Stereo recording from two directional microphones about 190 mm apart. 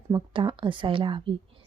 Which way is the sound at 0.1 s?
25° right (ahead or behind).